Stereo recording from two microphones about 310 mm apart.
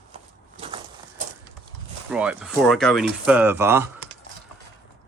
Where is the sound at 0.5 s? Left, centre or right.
Centre.